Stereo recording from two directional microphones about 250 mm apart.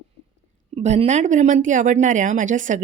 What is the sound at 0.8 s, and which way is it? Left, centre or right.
A woman's voice, right.